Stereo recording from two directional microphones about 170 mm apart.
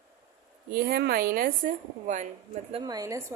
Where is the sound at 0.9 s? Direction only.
60° right (ahead or behind).